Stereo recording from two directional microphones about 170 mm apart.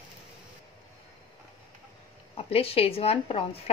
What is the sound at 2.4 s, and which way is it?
Speech, 35° left (ahead or behind).